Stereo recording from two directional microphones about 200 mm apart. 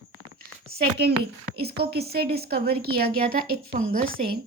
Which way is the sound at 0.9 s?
55° right (ahead or behind).